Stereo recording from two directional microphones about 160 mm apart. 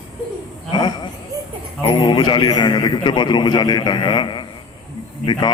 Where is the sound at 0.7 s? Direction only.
25° left (ahead or behind).